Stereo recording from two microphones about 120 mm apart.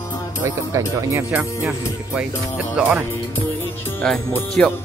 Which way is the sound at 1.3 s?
10° right (ahead or behind).